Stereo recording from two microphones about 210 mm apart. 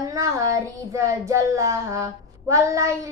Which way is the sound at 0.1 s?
15° right (ahead or behind).